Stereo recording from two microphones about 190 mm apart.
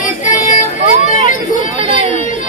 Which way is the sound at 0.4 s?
45° left (ahead or behind).